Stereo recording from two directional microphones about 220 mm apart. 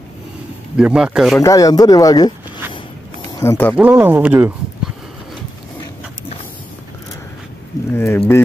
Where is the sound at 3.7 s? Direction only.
5° right (ahead or behind).